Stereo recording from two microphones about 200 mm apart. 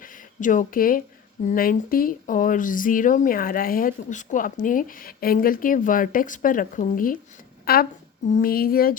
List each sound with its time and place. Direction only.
0.0 s a woman's voice: 40° left (ahead or behind)